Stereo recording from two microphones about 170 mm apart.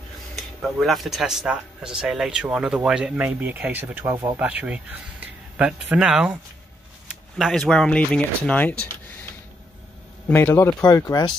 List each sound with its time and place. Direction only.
0.4 s speech: centre (ahead or behind)
7.3 s speech: centre (ahead or behind)
10.3 s speech: 15° left (ahead or behind)